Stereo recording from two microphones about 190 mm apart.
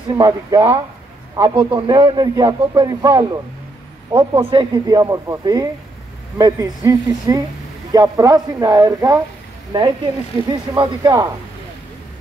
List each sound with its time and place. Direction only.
0.1 s a man's voice: 20° right (ahead or behind)
4.5 s a man's voice: 25° right (ahead or behind)